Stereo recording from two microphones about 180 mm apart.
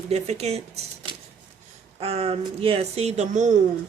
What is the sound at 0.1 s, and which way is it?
Speech, 35° right (ahead or behind).